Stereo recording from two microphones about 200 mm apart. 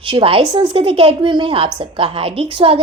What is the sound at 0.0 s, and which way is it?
A woman's voice, 25° right (ahead or behind).